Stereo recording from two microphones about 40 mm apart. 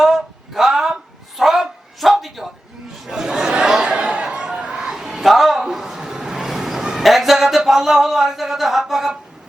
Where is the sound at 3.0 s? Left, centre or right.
Centre.